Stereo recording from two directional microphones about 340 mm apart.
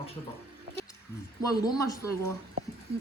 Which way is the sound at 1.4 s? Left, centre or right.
Centre.